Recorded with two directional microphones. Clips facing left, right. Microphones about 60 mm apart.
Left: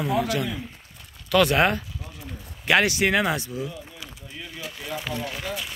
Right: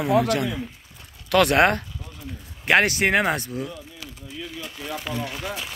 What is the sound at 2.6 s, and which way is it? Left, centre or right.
Speech, right.